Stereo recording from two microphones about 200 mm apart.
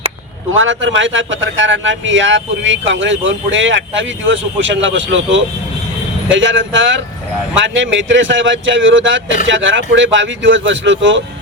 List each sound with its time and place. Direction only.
0.5 s a man's voice: 75° right (ahead or behind)